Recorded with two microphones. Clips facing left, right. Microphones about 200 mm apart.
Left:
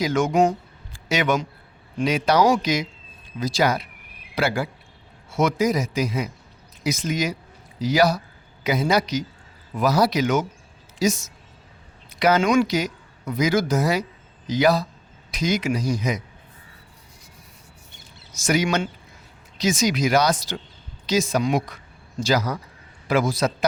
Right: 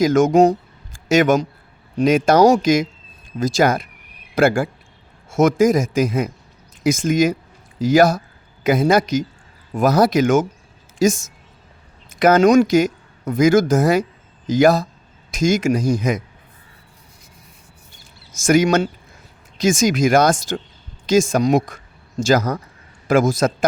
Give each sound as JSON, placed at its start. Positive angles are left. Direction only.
{"t": 0.0, "sound": "a man's voice", "side_deg": -45}
{"t": 18.3, "sound": "speech", "side_deg": -50}